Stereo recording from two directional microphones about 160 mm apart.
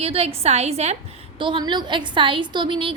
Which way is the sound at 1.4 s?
30° right (ahead or behind).